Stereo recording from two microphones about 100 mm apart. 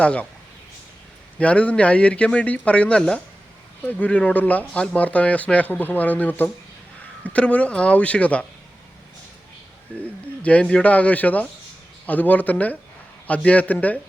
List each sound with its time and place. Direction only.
0.0 s speech: 10° left (ahead or behind)
1.4 s speech: 10° left (ahead or behind)
9.9 s speech: 15° left (ahead or behind)